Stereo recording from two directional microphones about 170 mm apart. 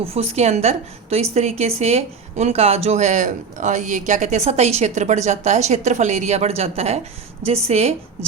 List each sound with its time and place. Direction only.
0.0 s a woman's voice: 35° right (ahead or behind)